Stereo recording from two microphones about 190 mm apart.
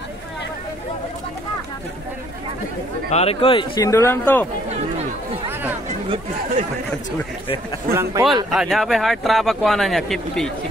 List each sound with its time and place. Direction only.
3.1 s speech: 35° left (ahead or behind); by 4.5 s 10° left (ahead or behind)
7.9 s speech: 15° right (ahead or behind)
8.5 s speech: centre (ahead or behind)